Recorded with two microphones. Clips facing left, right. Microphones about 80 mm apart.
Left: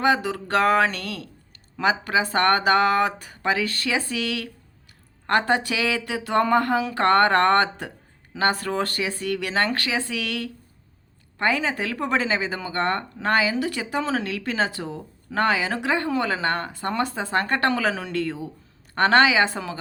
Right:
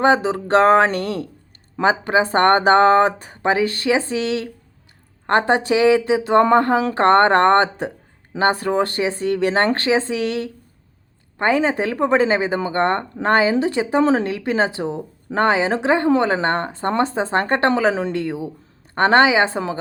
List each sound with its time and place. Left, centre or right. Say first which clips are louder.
0.0 s speech: right 5 dB; right